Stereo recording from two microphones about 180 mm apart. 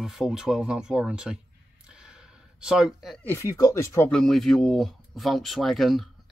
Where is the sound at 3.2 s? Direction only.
15° left (ahead or behind).